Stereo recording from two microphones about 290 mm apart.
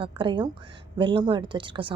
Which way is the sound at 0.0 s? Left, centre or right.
Centre.